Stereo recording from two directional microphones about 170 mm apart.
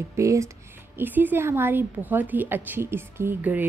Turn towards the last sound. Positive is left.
turn(degrees=-10)  # may be behind; listen again after turning